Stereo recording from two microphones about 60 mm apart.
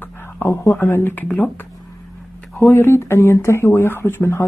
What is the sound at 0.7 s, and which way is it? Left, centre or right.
Speech, left.